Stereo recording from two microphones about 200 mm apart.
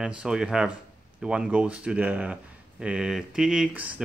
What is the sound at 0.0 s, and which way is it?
Speech, 5° right (ahead or behind).